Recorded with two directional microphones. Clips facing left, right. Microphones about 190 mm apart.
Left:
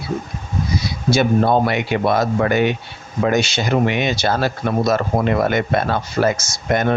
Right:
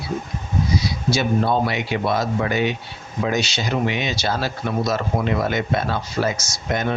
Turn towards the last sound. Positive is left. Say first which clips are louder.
# left 5 dB
turn(degrees=55)  # may be behind; listen again after turning